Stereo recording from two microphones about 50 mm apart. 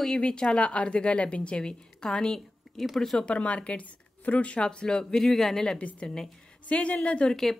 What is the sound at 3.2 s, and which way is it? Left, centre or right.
A woman's voice, left.